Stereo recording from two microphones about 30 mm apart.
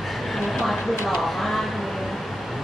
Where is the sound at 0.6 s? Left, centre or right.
Centre.